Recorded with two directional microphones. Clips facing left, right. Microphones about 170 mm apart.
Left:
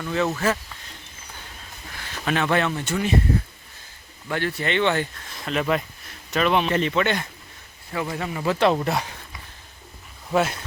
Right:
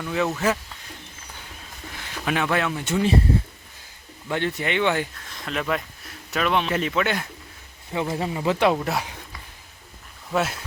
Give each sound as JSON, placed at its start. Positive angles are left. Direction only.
{"t": 0.0, "sound": "speech", "side_deg": -5}
{"t": 2.0, "sound": "speech", "side_deg": -15}
{"t": 2.8, "sound": "speech", "side_deg": -25}
{"t": 4.3, "sound": "speech", "side_deg": -20}
{"t": 5.3, "sound": "speech", "side_deg": 0}
{"t": 7.9, "sound": "speech", "side_deg": -25}
{"t": 8.4, "sound": "speech", "side_deg": -15}
{"t": 10.3, "sound": "speech", "side_deg": 0}